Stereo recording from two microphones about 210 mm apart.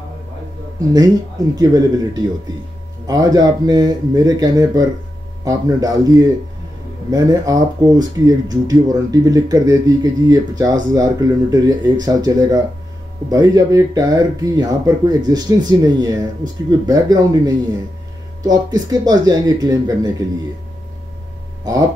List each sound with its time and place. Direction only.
0.7 s speech: 15° right (ahead or behind)
18.4 s speech: 20° right (ahead or behind)